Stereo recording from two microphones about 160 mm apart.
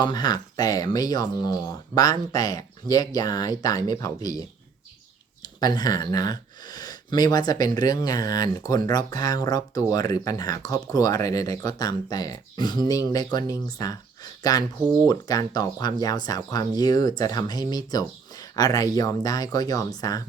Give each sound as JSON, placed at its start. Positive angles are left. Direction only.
{"t": 0.0, "sound": "speech", "side_deg": 25}